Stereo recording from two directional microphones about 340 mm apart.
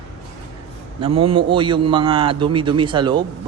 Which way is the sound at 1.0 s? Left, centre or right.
Centre.